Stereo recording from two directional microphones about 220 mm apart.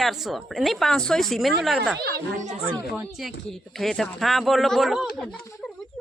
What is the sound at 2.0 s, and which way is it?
Speech, 40° right (ahead or behind).